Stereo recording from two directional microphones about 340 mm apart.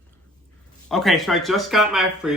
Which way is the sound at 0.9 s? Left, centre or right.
Centre.